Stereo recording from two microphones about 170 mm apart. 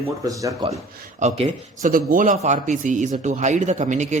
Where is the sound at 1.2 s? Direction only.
45° right (ahead or behind).